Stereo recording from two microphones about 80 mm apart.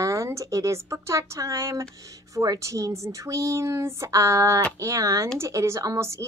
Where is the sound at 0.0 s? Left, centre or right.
Right.